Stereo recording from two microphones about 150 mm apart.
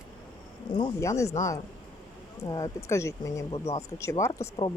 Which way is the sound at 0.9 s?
20° left (ahead or behind).